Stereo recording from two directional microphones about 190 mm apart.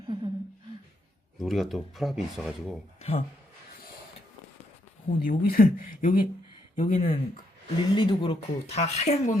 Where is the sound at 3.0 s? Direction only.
35° left (ahead or behind).